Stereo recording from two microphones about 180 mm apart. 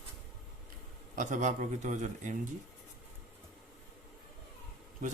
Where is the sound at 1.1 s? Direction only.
45° right (ahead or behind).